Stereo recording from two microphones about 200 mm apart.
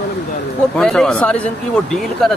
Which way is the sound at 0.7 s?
5° left (ahead or behind).